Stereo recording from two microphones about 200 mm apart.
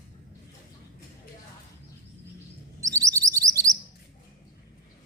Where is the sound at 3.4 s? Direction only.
15° right (ahead or behind).